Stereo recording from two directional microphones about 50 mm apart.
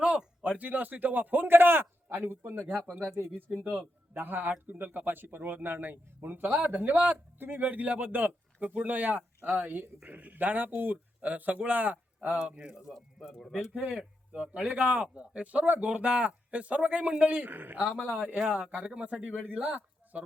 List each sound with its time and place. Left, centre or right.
0.0 s a sound: right
0.6 s speech: right
2.6 s speech: right
3.6 s speech: right
4.1 s speech: right
12.3 s speech: right
13.6 s speech: centre
14.3 s speech: right
17.5 s speech: right
18.1 s speech: right